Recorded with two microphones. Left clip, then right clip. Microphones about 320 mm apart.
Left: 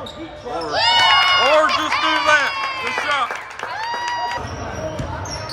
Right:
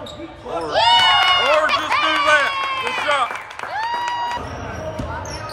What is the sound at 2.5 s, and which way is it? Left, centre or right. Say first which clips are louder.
Speech: right 1 dB; right.